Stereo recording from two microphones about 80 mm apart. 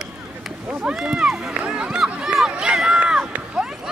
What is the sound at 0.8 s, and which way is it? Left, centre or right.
Run, centre.